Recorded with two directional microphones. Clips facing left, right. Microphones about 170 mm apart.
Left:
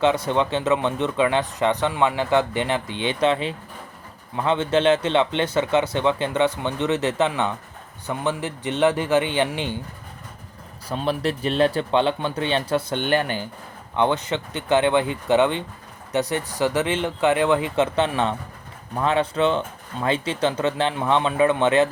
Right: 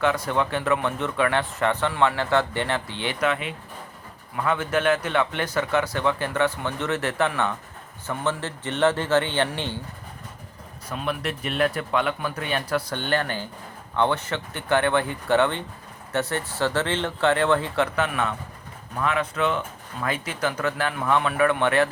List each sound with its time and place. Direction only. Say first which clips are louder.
0.0 s a man's voice: left 3 dB; 20° left (ahead or behind)
10.8 s a man's voice: left 5 dB; 30° left (ahead or behind); by 17.8 s 15° left (ahead or behind)
17.9 s speech: left 4 dB; 30° left (ahead or behind)